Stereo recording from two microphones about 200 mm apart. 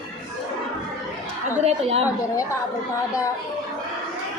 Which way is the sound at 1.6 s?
30° right (ahead or behind).